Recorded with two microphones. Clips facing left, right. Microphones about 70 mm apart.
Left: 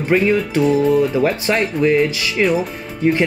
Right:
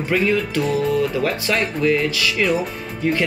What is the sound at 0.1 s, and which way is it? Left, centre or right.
Speech, left.